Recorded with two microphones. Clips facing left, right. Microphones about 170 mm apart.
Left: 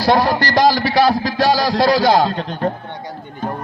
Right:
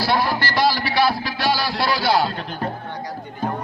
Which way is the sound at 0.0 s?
45° left (ahead or behind).